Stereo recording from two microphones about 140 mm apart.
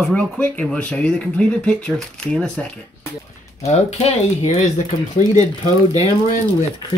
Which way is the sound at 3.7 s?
50° left (ahead or behind).